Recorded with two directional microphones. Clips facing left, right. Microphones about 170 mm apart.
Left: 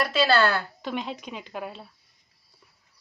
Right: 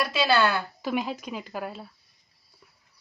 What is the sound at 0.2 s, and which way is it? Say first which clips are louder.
Speech: left 1 dB; 15° right (ahead or behind).